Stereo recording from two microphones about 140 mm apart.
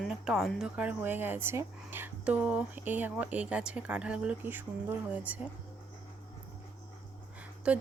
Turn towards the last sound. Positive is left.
turn(degrees=-10)  # may be behind; listen again after turning